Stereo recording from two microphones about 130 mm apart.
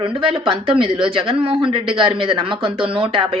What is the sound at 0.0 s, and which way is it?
Speech, 40° right (ahead or behind).